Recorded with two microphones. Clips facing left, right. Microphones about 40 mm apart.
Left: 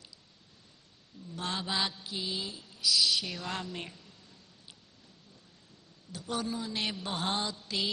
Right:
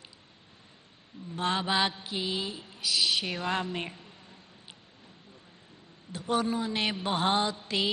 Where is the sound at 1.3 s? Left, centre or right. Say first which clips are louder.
Right 6 dB; right.